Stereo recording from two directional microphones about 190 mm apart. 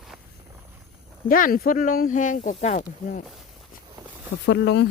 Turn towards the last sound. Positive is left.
turn(degrees=65)  # may be behind; listen again after turning